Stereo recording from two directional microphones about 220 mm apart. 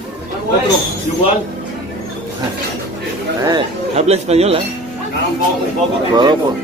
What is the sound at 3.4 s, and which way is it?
Speech, 20° right (ahead or behind).